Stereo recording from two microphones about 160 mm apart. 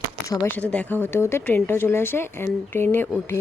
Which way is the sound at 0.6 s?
10° left (ahead or behind).